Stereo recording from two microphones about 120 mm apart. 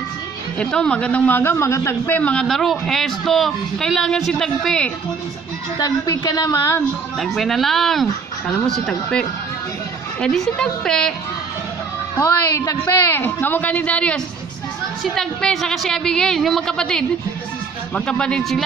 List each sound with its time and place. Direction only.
0.6 s a man's voice: 10° left (ahead or behind)
5.8 s a woman's voice: 30° left (ahead or behind)
7.2 s a woman's voice: centre (ahead or behind)
10.2 s a man's voice: 5° left (ahead or behind)
12.2 s a man's voice: 25° left (ahead or behind); by 18.6 s 5° left (ahead or behind)